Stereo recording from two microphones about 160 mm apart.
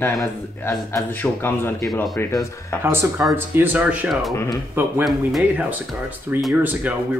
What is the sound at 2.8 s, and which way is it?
Speech, 15° right (ahead or behind).